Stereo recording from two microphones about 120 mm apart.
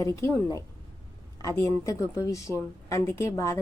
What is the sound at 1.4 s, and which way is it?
Speech, 30° left (ahead or behind).